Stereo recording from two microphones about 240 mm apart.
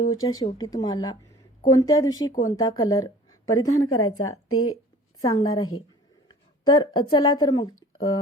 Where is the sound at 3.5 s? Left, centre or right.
Left.